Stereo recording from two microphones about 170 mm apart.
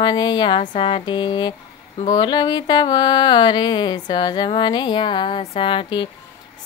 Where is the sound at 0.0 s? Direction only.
25° left (ahead or behind).